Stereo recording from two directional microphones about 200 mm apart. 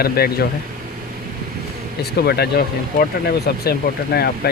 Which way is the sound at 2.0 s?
55° left (ahead or behind).